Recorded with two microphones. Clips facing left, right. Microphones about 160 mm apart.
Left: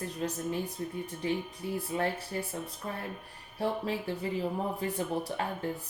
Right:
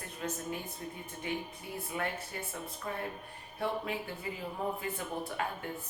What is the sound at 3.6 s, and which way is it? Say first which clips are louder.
Speech: left 3 dB; 35° left (ahead or behind).